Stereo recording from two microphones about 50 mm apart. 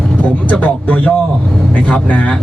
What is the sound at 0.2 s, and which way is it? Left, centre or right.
Speech, left.